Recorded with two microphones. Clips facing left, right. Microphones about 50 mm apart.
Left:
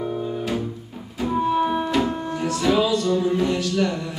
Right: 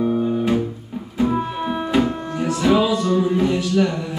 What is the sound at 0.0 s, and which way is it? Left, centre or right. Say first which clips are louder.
Music: right 7 dB; centre.